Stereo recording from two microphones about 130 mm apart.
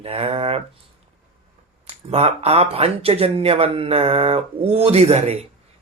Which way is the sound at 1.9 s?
50° right (ahead or behind).